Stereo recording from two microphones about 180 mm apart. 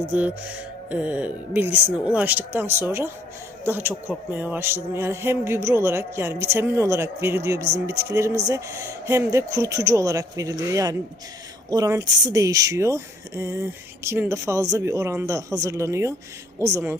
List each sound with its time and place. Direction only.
0.1 s speech: 10° right (ahead or behind)